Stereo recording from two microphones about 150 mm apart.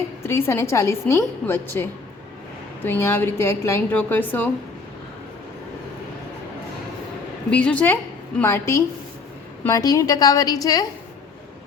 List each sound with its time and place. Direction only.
0.2 s a woman's voice: 15° left (ahead or behind)
7.5 s a woman's voice: 10° left (ahead or behind); by 10.8 s 25° left (ahead or behind)